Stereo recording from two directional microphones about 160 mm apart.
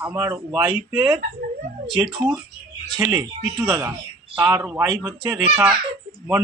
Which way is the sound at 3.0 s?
15° right (ahead or behind).